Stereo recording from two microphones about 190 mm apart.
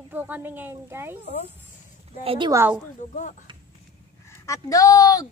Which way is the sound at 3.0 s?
40° left (ahead or behind).